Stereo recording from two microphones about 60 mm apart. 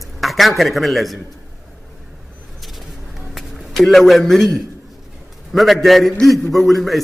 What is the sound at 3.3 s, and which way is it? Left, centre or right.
A man's voice, centre.